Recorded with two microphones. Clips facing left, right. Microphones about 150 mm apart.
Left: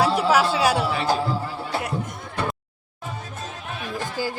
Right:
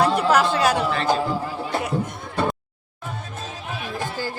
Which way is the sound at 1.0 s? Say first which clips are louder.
Right 1 dB; 15° right (ahead or behind).